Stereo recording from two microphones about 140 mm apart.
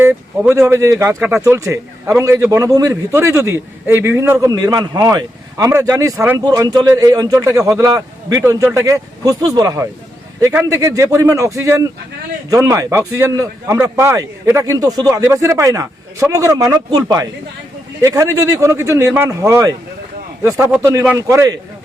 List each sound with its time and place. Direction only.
0.0 s a man's voice: 10° right (ahead or behind)